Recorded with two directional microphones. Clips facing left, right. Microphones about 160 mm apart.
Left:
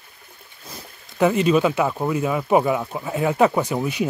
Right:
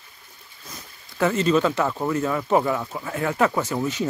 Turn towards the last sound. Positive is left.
turn(degrees=15)  # may be behind; listen again after turning